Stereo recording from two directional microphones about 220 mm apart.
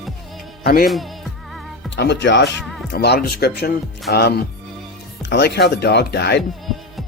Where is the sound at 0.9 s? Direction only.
Centre (ahead or behind).